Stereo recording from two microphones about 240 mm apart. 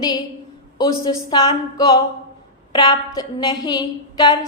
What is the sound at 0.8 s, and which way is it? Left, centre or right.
A woman's voice, centre.